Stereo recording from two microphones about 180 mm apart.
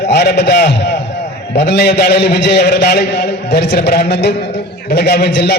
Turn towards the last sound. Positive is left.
turn(degrees=65)  # may be behind; listen again after turning